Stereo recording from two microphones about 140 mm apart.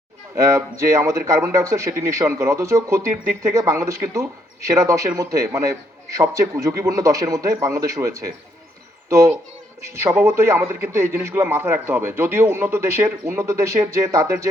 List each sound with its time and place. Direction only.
0.3 s a man's voice: 20° right (ahead or behind)